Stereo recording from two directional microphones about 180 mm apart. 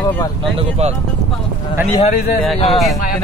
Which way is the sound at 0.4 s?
35° right (ahead or behind).